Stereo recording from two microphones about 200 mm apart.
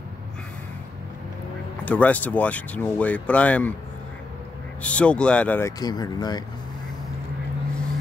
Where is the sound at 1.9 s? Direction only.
5° left (ahead or behind).